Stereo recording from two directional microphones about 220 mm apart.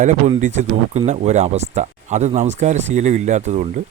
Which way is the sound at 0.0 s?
35° right (ahead or behind).